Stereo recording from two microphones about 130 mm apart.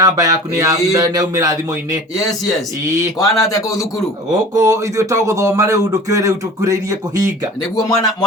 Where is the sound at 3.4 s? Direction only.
25° left (ahead or behind).